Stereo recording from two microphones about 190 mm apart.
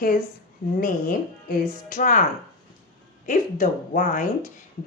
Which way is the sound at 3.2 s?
40° left (ahead or behind).